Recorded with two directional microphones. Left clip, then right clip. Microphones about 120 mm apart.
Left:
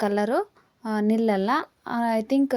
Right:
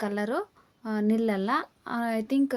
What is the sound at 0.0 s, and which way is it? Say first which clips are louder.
Speech: left 6 dB; 40° left (ahead or behind).